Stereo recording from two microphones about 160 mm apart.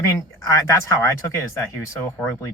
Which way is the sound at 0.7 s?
20° left (ahead or behind).